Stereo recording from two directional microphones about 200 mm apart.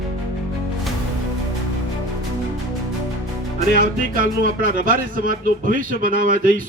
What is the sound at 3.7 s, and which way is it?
Speech, 45° right (ahead or behind).